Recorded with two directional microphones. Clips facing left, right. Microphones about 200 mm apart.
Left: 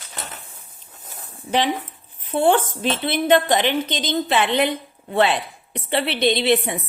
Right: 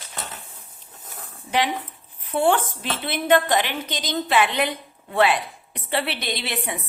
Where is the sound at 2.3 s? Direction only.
20° left (ahead or behind).